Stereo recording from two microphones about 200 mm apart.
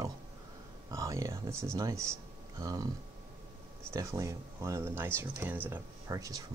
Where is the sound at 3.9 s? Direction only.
15° right (ahead or behind).